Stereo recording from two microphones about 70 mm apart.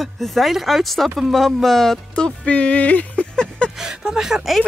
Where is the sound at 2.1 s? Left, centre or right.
Centre.